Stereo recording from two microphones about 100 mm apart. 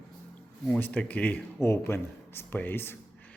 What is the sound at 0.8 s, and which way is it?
Speech, 15° left (ahead or behind).